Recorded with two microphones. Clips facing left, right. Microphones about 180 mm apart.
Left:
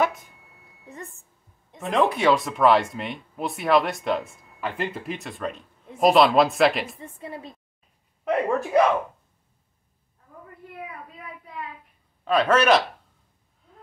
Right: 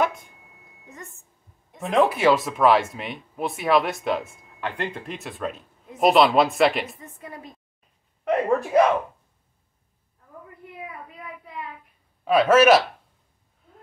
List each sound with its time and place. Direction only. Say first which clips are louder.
0.0 s a sound: even; centre (ahead or behind)
1.8 s speech: right 2 dB; centre (ahead or behind)
7.0 s a woman's voice: left 3 dB; 30° left (ahead or behind)
8.3 s speech: right 1 dB; centre (ahead or behind)
12.3 s speech: right 3 dB; 5° right (ahead or behind)